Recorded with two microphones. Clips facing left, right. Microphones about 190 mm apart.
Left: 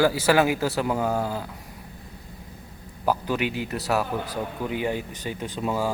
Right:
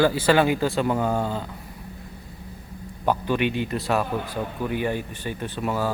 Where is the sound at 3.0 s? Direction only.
10° left (ahead or behind).